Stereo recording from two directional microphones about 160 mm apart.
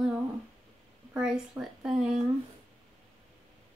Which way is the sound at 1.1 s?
5° right (ahead or behind).